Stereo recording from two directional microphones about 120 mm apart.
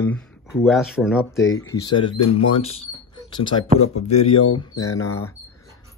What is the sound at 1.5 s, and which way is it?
Speech, 30° left (ahead or behind).